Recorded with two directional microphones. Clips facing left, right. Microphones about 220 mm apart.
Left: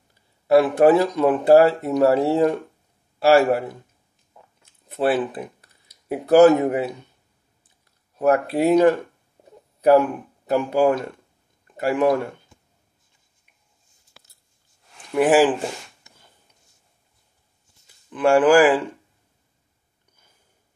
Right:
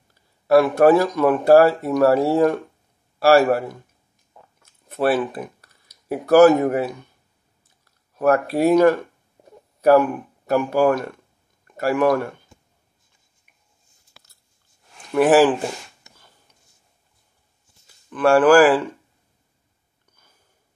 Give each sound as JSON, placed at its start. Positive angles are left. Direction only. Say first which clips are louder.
{"t": 0.5, "sound": "speech", "louder": "right 1 dB", "side_deg": 20}
{"t": 4.6, "sound": "a sound", "louder": "right 1 dB", "side_deg": 15}
{"t": 8.2, "sound": "speech", "louder": "right 1 dB", "side_deg": 20}
{"t": 15.1, "sound": "speech", "louder": "right 2 dB", "side_deg": 15}
{"t": 18.1, "sound": "speech", "louder": "right 1 dB", "side_deg": 15}